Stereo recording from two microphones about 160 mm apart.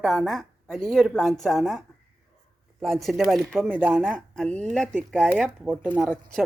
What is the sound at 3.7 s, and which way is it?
Speech, 10° right (ahead or behind).